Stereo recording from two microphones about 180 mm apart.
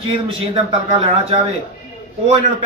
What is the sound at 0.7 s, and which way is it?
Speech, 30° right (ahead or behind).